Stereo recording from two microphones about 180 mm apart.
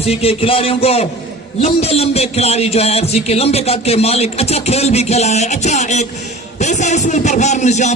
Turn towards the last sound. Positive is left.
turn(degrees=40)  # may be behind; listen again after turning